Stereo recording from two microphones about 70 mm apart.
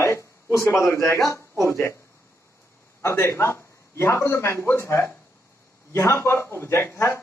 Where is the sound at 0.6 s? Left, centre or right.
Left.